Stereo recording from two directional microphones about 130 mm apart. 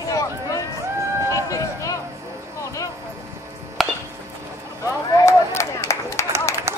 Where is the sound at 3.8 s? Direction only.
Centre (ahead or behind).